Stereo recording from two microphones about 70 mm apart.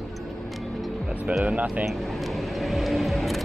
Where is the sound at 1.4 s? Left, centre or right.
Right.